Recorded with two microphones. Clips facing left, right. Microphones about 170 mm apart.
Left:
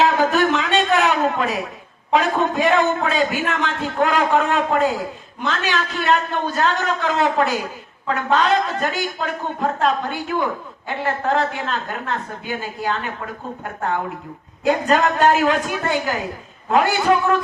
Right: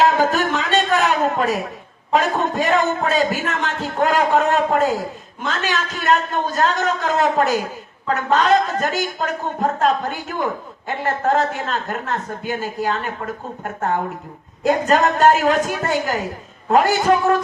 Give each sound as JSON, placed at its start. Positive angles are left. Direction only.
{"t": 0.0, "sound": "a sound", "side_deg": -40}
{"t": 2.1, "sound": "a man's voice", "side_deg": -40}
{"t": 14.6, "sound": "a man's voice", "side_deg": -40}